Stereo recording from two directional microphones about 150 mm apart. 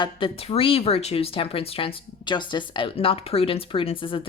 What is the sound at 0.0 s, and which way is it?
Speech, 40° left (ahead or behind).